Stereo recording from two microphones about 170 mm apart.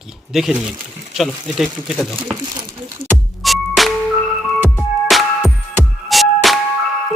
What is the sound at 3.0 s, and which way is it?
Music, 60° right (ahead or behind).